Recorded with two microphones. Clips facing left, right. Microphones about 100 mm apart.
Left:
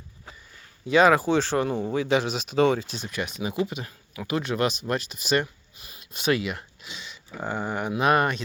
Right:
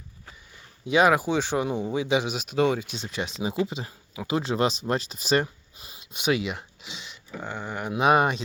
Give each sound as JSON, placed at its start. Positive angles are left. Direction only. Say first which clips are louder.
{"t": 0.9, "sound": "speech", "louder": "left 2 dB", "side_deg": -10}
{"t": 2.9, "sound": "speech", "louder": "even", "side_deg": -25}
{"t": 5.9, "sound": "speech", "louder": "left 1 dB", "side_deg": -20}
{"t": 7.3, "sound": "speech", "louder": "left 4 dB", "side_deg": 10}
{"t": 7.9, "sound": "speech", "louder": "right 2 dB", "side_deg": -15}